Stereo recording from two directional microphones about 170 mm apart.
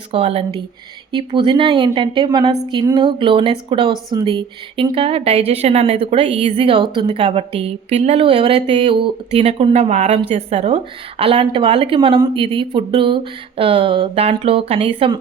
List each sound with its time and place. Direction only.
0.1 s a woman's voice: 35° right (ahead or behind)